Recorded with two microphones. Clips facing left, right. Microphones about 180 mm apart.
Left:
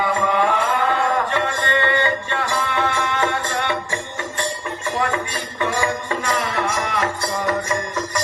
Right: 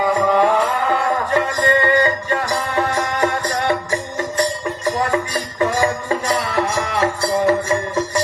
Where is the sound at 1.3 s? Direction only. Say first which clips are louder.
Right 5 dB; 40° right (ahead or behind).